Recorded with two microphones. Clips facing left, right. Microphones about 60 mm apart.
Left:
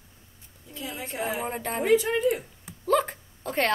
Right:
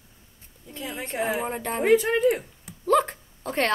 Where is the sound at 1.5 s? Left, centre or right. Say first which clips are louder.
Right 2 dB; centre.